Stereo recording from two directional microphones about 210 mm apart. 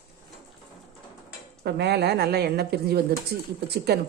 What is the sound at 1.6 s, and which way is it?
A woman's voice, 55° right (ahead or behind).